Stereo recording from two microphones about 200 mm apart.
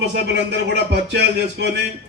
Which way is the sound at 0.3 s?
60° right (ahead or behind).